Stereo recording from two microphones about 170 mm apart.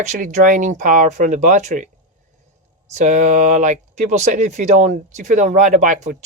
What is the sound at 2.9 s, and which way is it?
Speech, 45° right (ahead or behind).